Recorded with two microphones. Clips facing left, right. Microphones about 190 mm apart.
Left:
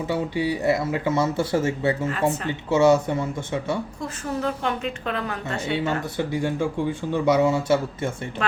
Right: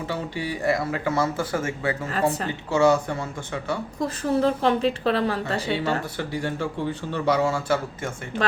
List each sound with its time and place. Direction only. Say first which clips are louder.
0.1 s speech: left 7 dB; 20° left (ahead or behind)
4.0 s speech: right 9 dB; 35° right (ahead or behind)
6.1 s speech: left 4 dB; 15° left (ahead or behind)
8.4 s speech: right 1 dB; 35° right (ahead or behind)